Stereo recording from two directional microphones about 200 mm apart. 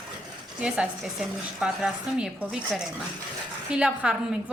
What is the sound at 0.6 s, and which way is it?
A woman's voice, 5° right (ahead or behind).